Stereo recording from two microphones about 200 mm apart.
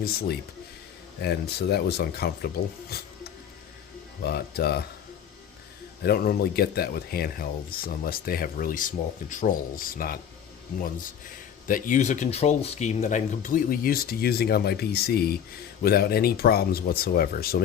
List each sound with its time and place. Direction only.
0.0 s speech: 50° left (ahead or behind)
4.2 s speech: 50° left (ahead or behind)
6.0 s speech: 50° left (ahead or behind)
11.7 s speech: 40° left (ahead or behind)